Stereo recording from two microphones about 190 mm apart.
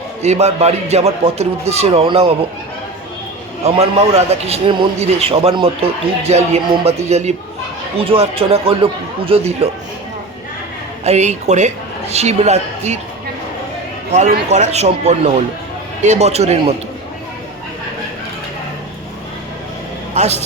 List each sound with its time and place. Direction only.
0.2 s a man's voice: 35° right (ahead or behind)
3.6 s a man's voice: 35° right (ahead or behind)
11.0 s a man's voice: 35° right (ahead or behind)
14.3 s a man's voice: 35° right (ahead or behind)
20.1 s a man's voice: 35° right (ahead or behind)